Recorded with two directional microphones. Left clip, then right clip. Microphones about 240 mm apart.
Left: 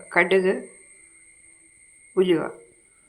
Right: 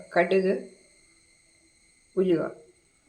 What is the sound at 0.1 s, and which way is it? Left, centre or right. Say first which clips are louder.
Speech: left 3 dB; centre.